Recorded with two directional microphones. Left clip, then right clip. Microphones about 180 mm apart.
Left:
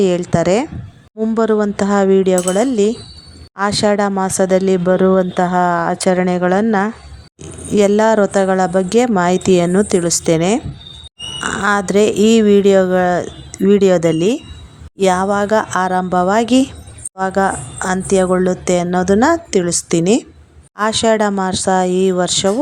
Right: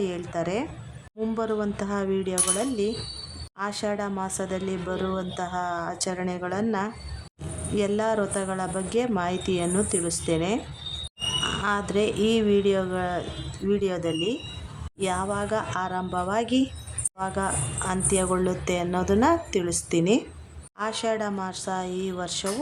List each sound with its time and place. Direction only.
0.0 s a woman's voice: 45° left (ahead or behind)